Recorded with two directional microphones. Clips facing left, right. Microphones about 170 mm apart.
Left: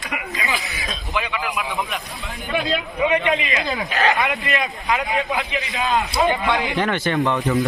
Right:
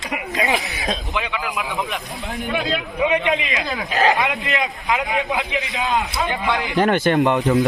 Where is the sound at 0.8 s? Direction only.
20° right (ahead or behind).